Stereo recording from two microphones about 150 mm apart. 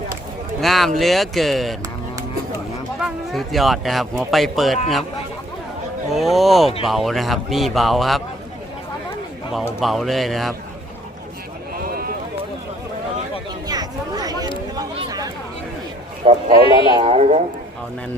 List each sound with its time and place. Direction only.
0.6 s speech: centre (ahead or behind)
3.0 s speech: centre (ahead or behind)
6.1 s speech: centre (ahead or behind)
9.8 s speech: centre (ahead or behind)
13.7 s chatter: 25° right (ahead or behind)
14.8 s a sound: 25° right (ahead or behind)
16.2 s speech: 40° right (ahead or behind)
16.6 s speech: 35° left (ahead or behind)
17.0 s speech: 45° right (ahead or behind)